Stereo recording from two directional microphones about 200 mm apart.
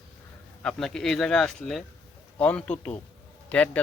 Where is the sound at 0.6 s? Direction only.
5° left (ahead or behind).